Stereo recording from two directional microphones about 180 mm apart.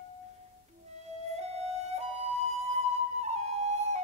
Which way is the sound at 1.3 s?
35° right (ahead or behind).